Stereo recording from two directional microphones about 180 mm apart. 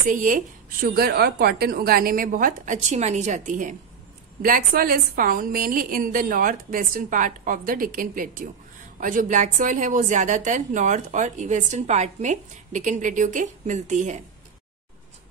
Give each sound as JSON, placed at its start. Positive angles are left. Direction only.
{"t": 0.1, "sound": "a woman's voice", "side_deg": -45}